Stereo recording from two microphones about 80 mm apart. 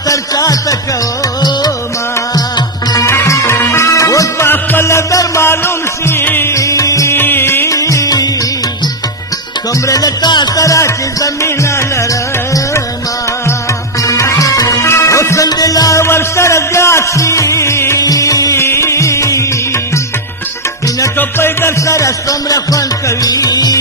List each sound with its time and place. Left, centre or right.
0.1 s speech: left
2.3 s music: left
3.1 s music: left
4.5 s music: left
7.2 s music: left
7.7 s music: left
9.8 s music: left
10.6 s music: left
14.0 s music: left
16.0 s music: left
18.0 s music: left
21.2 s music: left